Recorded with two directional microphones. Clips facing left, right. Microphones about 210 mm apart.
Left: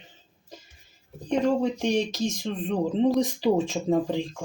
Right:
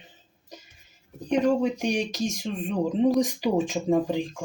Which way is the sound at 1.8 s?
15° right (ahead or behind).